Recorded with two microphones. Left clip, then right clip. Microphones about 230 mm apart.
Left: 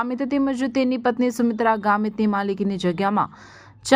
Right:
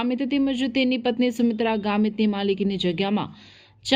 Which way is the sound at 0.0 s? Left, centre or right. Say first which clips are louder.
Left 1 dB; left.